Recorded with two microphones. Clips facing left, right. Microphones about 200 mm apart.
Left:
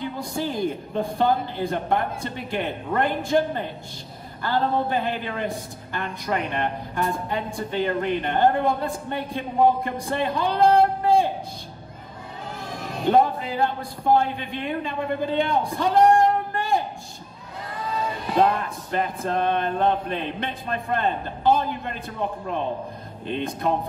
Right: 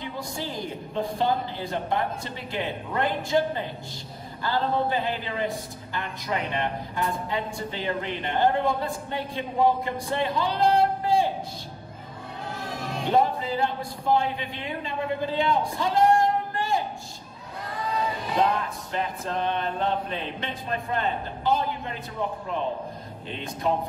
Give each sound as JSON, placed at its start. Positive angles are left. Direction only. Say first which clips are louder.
{"t": 0.9, "sound": "a woman's voice", "louder": "left 2 dB", "side_deg": 55}
{"t": 13.1, "sound": "speech", "louder": "left 3 dB", "side_deg": 55}
{"t": 17.6, "sound": "child singing", "louder": "even", "side_deg": 0}
{"t": 18.3, "sound": "a woman's voice", "louder": "left 4 dB", "side_deg": 55}
{"t": 23.2, "sound": "speech", "louder": "left 4 dB", "side_deg": 55}